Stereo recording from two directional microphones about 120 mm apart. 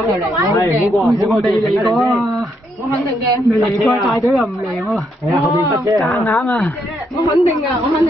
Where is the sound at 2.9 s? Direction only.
25° left (ahead or behind).